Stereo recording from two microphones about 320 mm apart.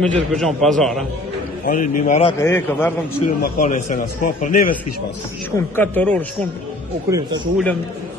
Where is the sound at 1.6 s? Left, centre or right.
Left.